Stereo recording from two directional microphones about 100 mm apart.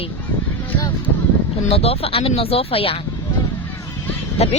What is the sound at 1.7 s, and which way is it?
Speech, 90° left.